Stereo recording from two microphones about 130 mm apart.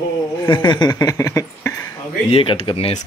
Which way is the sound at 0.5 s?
35° left (ahead or behind).